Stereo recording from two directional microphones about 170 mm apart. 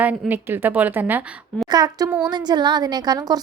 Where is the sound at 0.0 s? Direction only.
10° right (ahead or behind).